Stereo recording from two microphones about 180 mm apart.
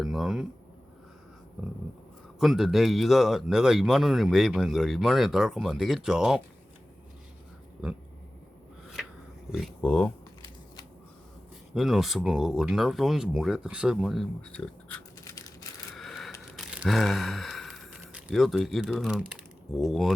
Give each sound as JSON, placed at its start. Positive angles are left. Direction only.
{"t": 0.0, "sound": "speech", "side_deg": 0}
{"t": 2.4, "sound": "speech", "side_deg": 0}
{"t": 9.5, "sound": "speech", "side_deg": 0}
{"t": 11.7, "sound": "speech", "side_deg": 0}
{"t": 15.2, "sound": "a sound", "side_deg": 20}
{"t": 16.0, "sound": "a sound", "side_deg": 0}
{"t": 16.6, "sound": "speech", "side_deg": -5}